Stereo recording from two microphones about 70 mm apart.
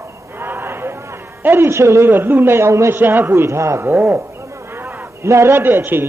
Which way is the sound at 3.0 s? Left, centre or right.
Right.